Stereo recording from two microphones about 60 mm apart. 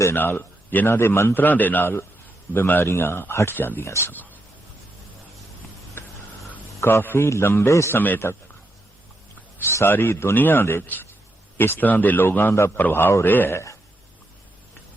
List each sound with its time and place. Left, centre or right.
0.2 s a man's voice: left
1.4 s a man's voice: left
3.8 s a man's voice: left
4.1 s speech: left
6.0 s a sound: left
6.8 s a man's voice: left
7.9 s a man's voice: left
9.6 s a man's voice: left
11.8 s a man's voice: left